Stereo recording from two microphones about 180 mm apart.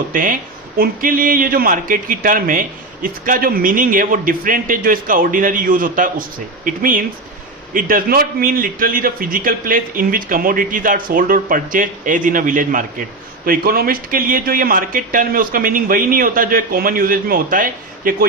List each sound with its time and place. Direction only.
0.1 s a man's voice: 50° right (ahead or behind)
7.7 s a man's voice: 50° right (ahead or behind)